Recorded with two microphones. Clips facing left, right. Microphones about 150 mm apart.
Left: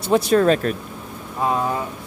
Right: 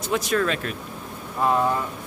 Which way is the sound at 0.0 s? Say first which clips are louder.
Left 7 dB; 30° left (ahead or behind).